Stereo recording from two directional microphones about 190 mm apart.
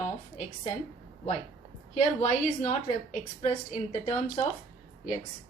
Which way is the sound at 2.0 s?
40° left (ahead or behind).